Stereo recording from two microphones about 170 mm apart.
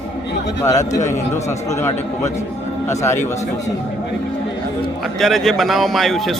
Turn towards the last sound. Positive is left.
turn(degrees=0)  # may be behind; listen again after turning